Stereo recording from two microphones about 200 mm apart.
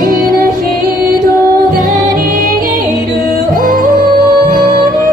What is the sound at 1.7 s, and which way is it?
Music, 45° right (ahead or behind).